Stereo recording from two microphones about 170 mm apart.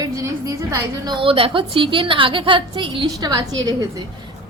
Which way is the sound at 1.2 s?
30° right (ahead or behind).